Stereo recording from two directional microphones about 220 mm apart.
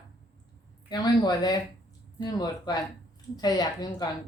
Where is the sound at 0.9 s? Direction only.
20° left (ahead or behind).